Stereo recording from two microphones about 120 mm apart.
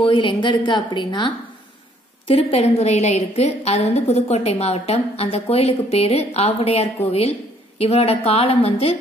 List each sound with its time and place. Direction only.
0.0 s a woman's voice: 40° left (ahead or behind)
2.2 s a woman's voice: 55° left (ahead or behind)